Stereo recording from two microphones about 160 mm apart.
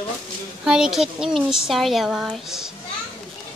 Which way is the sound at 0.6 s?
5° right (ahead or behind).